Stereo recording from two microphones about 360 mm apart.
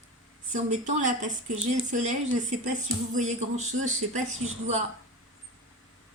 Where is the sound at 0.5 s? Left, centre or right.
Centre.